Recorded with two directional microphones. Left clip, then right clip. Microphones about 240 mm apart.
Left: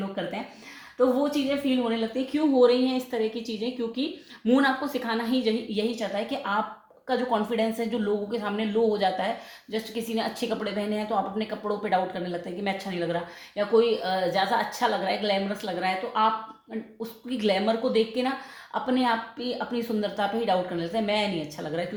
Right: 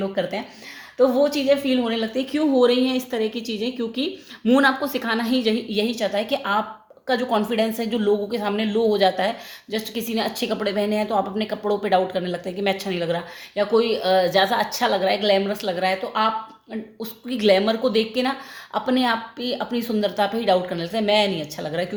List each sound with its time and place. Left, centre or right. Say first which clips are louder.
0.9 s a woman's voice: right 6 dB; right